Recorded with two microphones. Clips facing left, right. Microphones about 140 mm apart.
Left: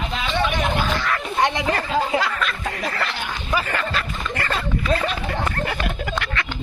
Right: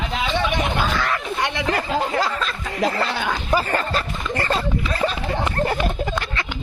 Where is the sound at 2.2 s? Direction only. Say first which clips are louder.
Even; 30° right (ahead or behind).